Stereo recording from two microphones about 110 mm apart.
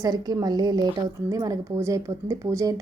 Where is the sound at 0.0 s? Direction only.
35° right (ahead or behind).